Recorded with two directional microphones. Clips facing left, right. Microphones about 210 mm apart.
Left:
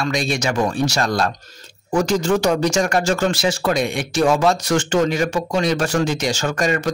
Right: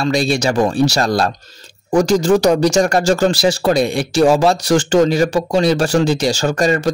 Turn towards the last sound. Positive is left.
turn(degrees=-35)  # may be behind; listen again after turning